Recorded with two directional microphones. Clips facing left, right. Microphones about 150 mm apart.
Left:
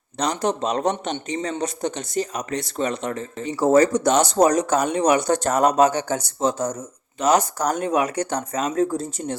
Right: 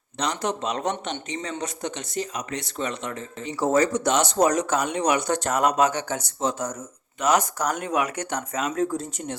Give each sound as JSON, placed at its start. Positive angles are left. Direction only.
{"t": 0.2, "sound": "a man's voice", "side_deg": 35}